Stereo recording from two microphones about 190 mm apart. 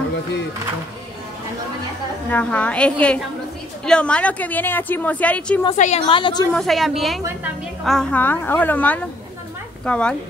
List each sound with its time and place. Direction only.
2.3 s a woman's voice: 5° left (ahead or behind)
5.8 s a woman's voice: 35° left (ahead or behind)
6.5 s a woman's voice: centre (ahead or behind)